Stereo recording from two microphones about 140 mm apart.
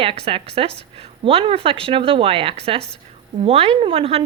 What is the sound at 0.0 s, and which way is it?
A woman's voice, 40° right (ahead or behind).